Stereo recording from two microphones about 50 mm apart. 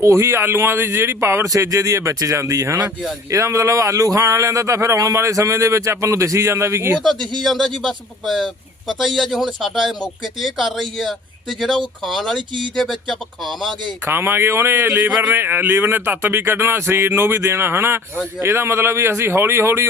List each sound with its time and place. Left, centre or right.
0.0 s speech: right
3.3 s speech: right
7.0 s speech: centre
14.0 s speech: right